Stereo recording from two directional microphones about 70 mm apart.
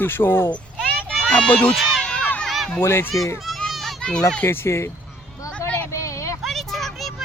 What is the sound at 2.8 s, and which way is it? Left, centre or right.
Speech, left.